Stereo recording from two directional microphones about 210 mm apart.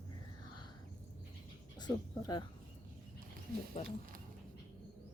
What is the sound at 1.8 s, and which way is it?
Speech, 20° left (ahead or behind).